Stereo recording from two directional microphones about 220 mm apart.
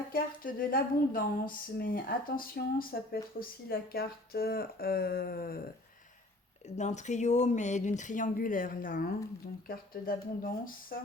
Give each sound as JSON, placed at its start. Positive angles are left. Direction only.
{"t": 0.1, "sound": "a woman's voice", "side_deg": 40}
{"t": 6.7, "sound": "speech", "side_deg": 30}